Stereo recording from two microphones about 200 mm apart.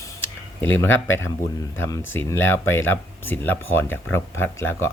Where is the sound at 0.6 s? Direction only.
10° left (ahead or behind).